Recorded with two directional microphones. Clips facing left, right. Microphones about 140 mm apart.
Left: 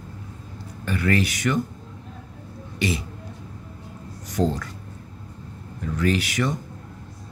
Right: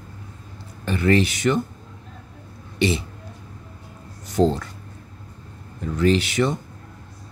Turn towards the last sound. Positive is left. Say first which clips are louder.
# right 4 dB
turn(degrees=-25)  # may be behind; listen again after turning